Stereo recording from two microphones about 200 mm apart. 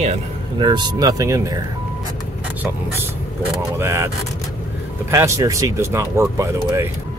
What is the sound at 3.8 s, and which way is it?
Speech, 15° right (ahead or behind).